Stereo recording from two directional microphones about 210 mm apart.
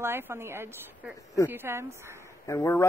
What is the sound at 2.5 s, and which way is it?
Speech, 15° left (ahead or behind).